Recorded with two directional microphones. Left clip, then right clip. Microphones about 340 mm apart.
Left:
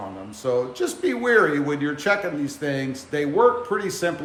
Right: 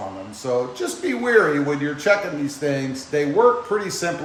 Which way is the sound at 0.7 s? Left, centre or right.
Centre.